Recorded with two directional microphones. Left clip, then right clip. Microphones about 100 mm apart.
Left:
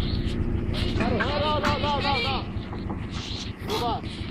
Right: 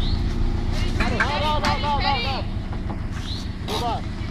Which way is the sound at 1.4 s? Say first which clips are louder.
Right 2 dB; 25° right (ahead or behind).